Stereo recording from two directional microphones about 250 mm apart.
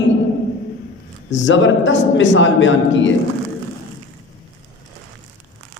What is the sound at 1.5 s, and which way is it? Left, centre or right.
A man's voice, left.